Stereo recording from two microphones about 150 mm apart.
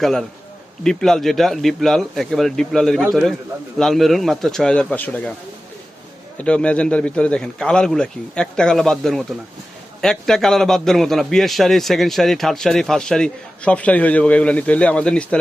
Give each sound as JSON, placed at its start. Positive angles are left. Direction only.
{"t": 0.0, "sound": "a man's voice", "side_deg": 0}
{"t": 6.3, "sound": "a man's voice", "side_deg": 5}